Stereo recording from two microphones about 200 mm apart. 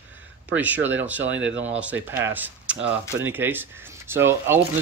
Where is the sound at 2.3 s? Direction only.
10° right (ahead or behind).